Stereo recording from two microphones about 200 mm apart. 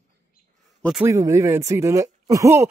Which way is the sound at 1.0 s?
15° right (ahead or behind).